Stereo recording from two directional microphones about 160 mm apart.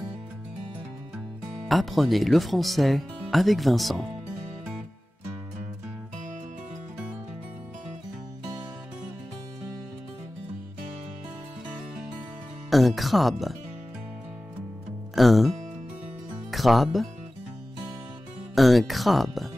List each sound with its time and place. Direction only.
1.7 s speech: centre (ahead or behind)
12.6 s speech: centre (ahead or behind)
15.1 s speech: centre (ahead or behind)
18.5 s speech: centre (ahead or behind)